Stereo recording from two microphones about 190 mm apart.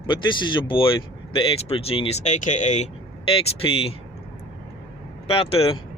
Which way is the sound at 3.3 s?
30° left (ahead or behind).